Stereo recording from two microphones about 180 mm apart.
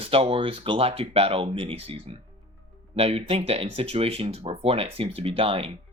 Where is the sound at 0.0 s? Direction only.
30° right (ahead or behind).